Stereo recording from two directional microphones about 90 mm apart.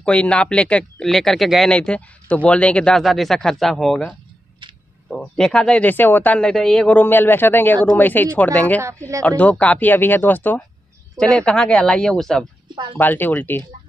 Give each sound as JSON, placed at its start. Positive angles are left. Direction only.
{"t": 0.0, "sound": "speech", "side_deg": 15}
{"t": 1.7, "sound": "speech", "side_deg": 10}
{"t": 3.0, "sound": "speech", "side_deg": 0}
{"t": 5.1, "sound": "speech", "side_deg": 5}
{"t": 7.0, "sound": "speech", "side_deg": 20}
{"t": 8.8, "sound": "speech", "side_deg": -30}
{"t": 9.4, "sound": "speech", "side_deg": 15}
{"t": 11.1, "sound": "speech", "side_deg": 5}
{"t": 12.6, "sound": "a sound", "side_deg": -60}
{"t": 12.9, "sound": "speech", "side_deg": 20}